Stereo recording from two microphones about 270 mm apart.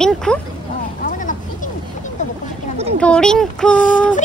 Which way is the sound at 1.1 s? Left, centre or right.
Left.